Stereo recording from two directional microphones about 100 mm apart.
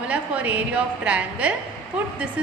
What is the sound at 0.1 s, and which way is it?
A woman's voice, 15° right (ahead or behind).